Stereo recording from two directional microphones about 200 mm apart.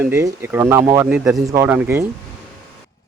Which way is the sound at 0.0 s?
15° right (ahead or behind).